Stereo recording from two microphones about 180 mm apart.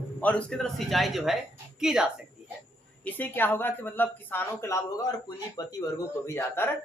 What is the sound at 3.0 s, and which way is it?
A woman's voice, 10° left (ahead or behind).